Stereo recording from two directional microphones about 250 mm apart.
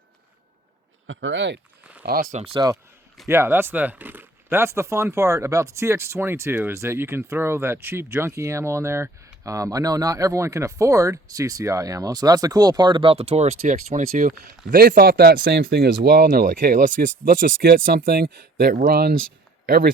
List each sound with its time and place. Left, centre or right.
1.0 s speech: right
2.0 s speech: right
2.4 s speech: centre; by 19.9 s right